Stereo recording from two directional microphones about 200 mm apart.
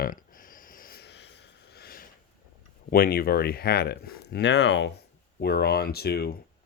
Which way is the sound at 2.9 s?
50° left (ahead or behind).